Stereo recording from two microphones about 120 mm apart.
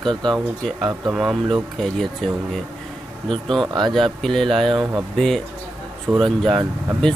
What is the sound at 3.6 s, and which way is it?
Speech, 40° right (ahead or behind).